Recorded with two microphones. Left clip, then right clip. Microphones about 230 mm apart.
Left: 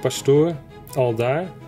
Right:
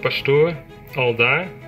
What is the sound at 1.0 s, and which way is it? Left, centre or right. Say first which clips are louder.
Speech: right 3 dB; left.